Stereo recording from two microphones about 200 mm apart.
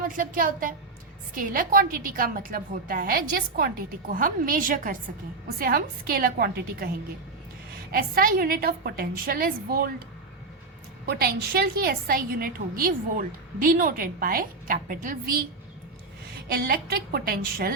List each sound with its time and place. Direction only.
0.1 s a woman's voice: 45° right (ahead or behind)
4.1 s a woman's voice: 45° right (ahead or behind)
7.9 s a woman's voice: 45° right (ahead or behind)
11.0 s a woman's voice: 50° right (ahead or behind)
16.5 s a woman's voice: 50° right (ahead or behind)